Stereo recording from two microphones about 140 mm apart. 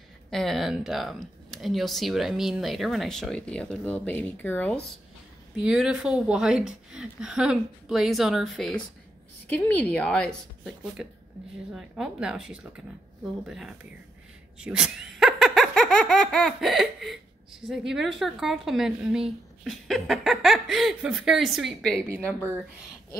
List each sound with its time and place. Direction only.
0.3 s speech: centre (ahead or behind)
5.6 s a woman's voice: 5° right (ahead or behind)